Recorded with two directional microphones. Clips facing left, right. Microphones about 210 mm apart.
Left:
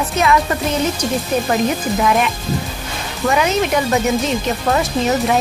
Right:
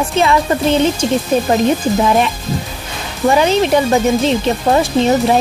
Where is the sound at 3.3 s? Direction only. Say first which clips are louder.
Right 4 dB; 30° right (ahead or behind).